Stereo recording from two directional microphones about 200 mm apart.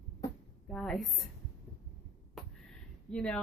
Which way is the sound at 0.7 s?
Centre (ahead or behind).